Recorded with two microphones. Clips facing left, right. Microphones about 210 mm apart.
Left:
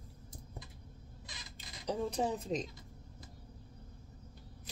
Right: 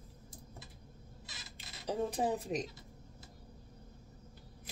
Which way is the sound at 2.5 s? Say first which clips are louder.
Even; 10° right (ahead or behind).